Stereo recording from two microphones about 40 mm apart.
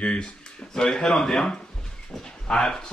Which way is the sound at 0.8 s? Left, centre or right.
Centre.